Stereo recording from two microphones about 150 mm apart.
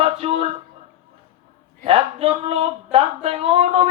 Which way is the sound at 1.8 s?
40° right (ahead or behind).